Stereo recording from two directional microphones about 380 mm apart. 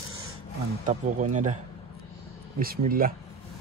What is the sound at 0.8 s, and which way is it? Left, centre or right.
Speech, centre.